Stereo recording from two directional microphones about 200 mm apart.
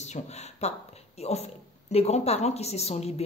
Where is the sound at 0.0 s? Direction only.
35° left (ahead or behind).